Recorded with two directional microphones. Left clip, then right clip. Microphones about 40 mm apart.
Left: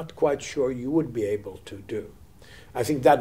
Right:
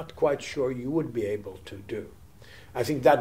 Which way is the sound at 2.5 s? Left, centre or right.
Left.